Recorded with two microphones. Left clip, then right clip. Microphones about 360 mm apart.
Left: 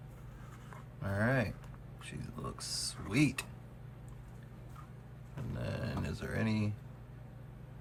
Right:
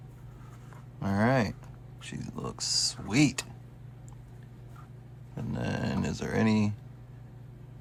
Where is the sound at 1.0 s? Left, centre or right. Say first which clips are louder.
Right 6 dB; centre.